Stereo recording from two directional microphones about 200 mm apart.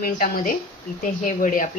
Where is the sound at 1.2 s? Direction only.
40° left (ahead or behind).